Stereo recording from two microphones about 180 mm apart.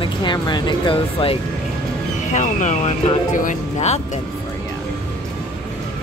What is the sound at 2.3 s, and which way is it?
Speech, 45° left (ahead or behind).